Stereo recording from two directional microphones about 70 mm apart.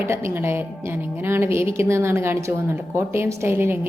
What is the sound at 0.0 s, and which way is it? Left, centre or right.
A woman's voice, right.